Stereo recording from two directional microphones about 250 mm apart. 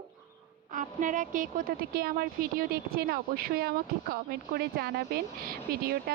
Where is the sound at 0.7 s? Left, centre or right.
Right.